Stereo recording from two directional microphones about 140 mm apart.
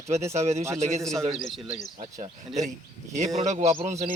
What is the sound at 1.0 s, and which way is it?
Speech, 5° left (ahead or behind).